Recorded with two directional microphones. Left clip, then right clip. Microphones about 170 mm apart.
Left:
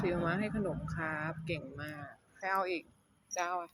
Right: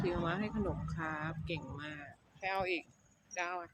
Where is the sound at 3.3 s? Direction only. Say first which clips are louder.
Left 3 dB; 10° left (ahead or behind).